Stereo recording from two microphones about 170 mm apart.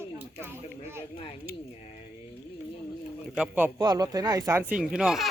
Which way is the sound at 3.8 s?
20° right (ahead or behind).